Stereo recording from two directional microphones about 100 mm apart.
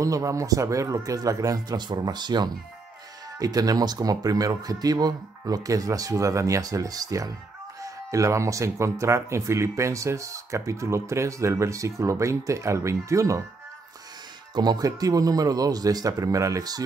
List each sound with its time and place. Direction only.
0.0 s speech: 35° right (ahead or behind)
14.5 s speech: 45° right (ahead or behind)